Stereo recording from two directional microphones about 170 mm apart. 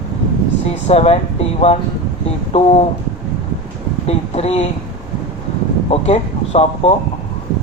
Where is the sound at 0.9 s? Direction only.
35° left (ahead or behind).